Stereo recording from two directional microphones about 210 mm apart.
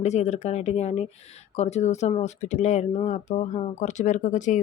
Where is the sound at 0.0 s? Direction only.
30° left (ahead or behind).